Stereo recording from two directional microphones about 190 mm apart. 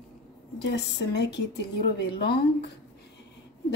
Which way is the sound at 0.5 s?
60° left (ahead or behind).